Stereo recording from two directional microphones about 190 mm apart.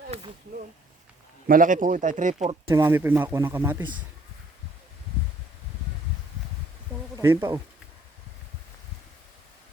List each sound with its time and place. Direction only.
1.5 s speech: 45° right (ahead or behind)
2.6 s speech: 15° right (ahead or behind)
7.2 s speech: 10° right (ahead or behind)